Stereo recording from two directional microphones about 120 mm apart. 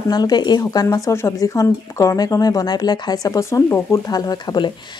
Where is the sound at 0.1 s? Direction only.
35° left (ahead or behind).